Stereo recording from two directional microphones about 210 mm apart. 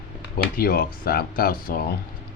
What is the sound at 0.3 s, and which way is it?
Speech, 45° left (ahead or behind).